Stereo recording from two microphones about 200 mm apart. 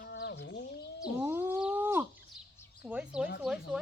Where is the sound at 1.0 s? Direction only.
10° right (ahead or behind).